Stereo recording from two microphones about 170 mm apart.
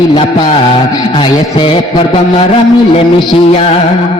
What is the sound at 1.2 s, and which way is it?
Music, 30° left (ahead or behind).